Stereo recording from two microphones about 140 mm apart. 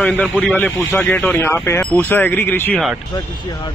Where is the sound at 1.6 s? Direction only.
15° left (ahead or behind).